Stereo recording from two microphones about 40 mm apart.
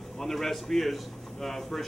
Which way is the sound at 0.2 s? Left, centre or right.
Centre.